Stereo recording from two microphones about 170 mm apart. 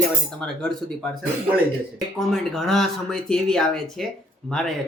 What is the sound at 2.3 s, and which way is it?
Speech, centre (ahead or behind).